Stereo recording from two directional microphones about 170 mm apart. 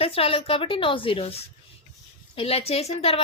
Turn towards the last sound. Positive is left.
turn(degrees=35)  # may be behind; listen again after turning